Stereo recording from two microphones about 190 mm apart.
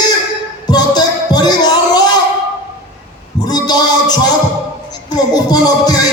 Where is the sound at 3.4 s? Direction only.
20° left (ahead or behind).